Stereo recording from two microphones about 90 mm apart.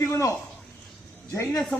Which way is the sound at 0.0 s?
30° left (ahead or behind).